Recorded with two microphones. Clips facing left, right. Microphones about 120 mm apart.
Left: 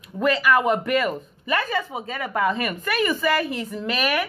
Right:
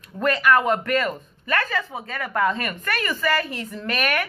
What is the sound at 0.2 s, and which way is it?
Speech, 5° left (ahead or behind).